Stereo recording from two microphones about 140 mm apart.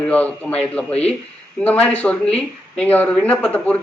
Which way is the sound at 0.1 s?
10° left (ahead or behind).